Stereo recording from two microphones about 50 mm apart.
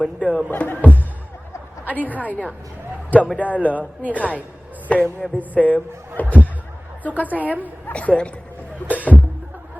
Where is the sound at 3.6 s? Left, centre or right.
Right.